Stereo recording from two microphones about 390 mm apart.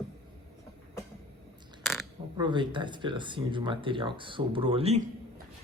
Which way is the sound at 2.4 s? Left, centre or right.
Centre.